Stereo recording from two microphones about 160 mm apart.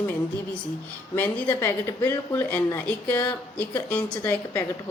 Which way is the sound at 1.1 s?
10° left (ahead or behind).